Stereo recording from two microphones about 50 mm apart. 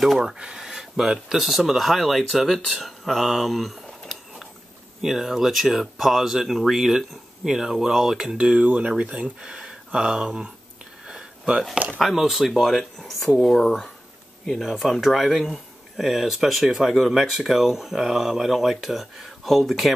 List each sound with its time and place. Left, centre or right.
0.0 s speech: centre
0.4 s speech: centre
0.7 s speech: centre
5.0 s speech: centre
8.4 s speech: right
9.4 s speech: centre
11.1 s a sound: centre
12.0 s speech: centre
14.5 s speech: centre